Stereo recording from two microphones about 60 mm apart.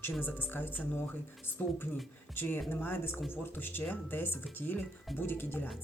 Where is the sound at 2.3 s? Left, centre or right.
Left.